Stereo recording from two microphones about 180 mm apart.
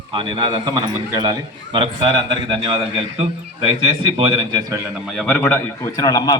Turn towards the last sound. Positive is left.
turn(degrees=20)  # may be behind; listen again after turning